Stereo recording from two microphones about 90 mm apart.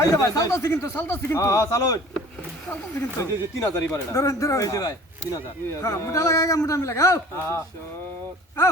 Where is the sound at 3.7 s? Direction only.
30° left (ahead or behind).